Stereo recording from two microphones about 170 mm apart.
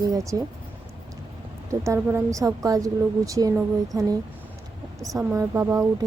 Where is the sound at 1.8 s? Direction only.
15° right (ahead or behind).